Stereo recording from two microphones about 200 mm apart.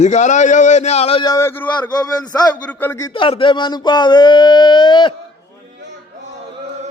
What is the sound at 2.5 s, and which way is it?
A man's voice, 10° left (ahead or behind).